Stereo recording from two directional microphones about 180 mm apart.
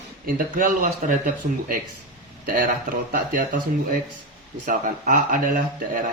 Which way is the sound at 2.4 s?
50° right (ahead or behind).